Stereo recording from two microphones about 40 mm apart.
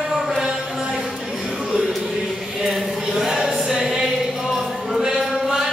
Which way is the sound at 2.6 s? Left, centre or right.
Centre.